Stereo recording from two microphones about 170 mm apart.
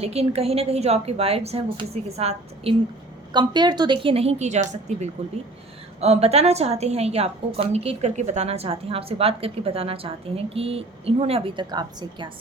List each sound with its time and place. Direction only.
0.0 s a woman's voice: 35° right (ahead or behind)
3.3 s a woman's voice: 25° right (ahead or behind)